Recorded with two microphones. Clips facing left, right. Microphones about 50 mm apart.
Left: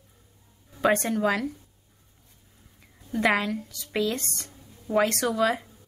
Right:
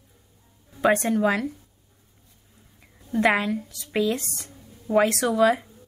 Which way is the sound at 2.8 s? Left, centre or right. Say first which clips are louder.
Right 4 dB; centre.